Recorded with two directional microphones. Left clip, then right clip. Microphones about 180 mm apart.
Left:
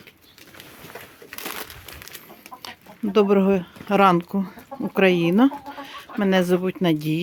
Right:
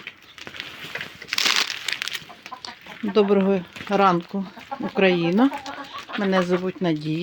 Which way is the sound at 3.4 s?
40° left (ahead or behind).